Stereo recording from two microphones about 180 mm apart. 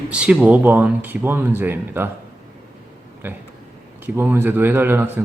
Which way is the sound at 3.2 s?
10° right (ahead or behind).